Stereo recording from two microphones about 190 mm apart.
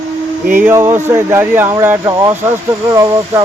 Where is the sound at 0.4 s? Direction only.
10° right (ahead or behind).